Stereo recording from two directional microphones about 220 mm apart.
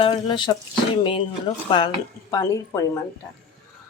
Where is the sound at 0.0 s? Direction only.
20° left (ahead or behind).